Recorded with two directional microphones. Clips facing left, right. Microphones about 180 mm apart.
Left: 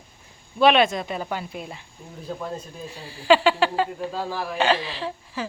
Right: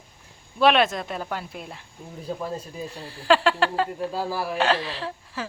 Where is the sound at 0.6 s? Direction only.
Centre (ahead or behind).